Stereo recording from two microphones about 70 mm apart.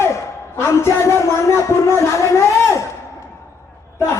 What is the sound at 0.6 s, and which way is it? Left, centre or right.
Speech, left.